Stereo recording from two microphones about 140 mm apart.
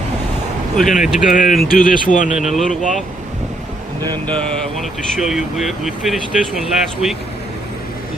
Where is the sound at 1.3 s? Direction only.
65° left (ahead or behind).